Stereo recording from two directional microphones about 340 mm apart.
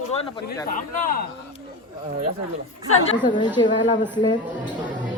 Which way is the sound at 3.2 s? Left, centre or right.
Centre.